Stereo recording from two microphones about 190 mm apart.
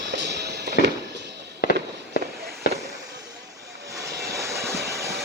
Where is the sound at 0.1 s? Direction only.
65° right (ahead or behind).